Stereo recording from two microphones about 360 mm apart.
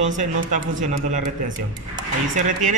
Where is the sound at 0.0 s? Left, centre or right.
Right.